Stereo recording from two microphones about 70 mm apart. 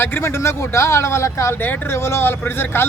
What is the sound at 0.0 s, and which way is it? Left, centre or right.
Speech, left.